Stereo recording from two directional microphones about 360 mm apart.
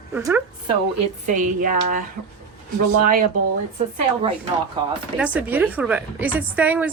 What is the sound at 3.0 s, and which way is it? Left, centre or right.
Speech, right.